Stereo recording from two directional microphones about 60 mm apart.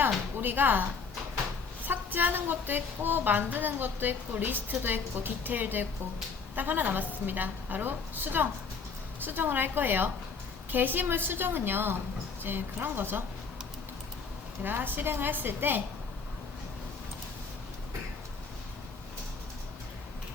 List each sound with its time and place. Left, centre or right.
0.3 s a woman's voice: right
14.6 s a woman's voice: right